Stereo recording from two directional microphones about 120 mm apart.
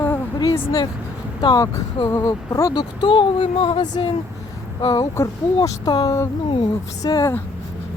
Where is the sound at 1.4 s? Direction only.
35° left (ahead or behind).